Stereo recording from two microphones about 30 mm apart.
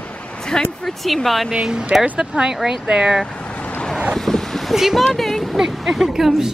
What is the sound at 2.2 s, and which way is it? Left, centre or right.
Speech, right.